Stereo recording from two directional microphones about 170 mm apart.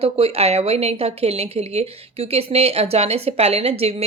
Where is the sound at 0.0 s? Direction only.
35° right (ahead or behind).